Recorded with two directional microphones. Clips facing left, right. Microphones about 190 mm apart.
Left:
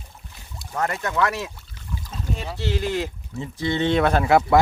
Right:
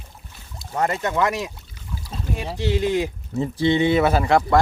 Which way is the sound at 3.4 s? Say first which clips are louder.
Right 7 dB; 30° right (ahead or behind).